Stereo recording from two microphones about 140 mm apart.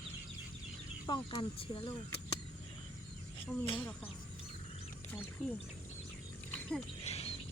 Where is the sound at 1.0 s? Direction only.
35° left (ahead or behind).